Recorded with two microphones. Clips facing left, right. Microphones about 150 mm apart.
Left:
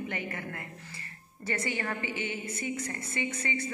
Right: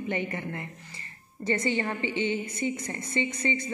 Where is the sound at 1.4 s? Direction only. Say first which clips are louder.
Right 6 dB; 20° right (ahead or behind).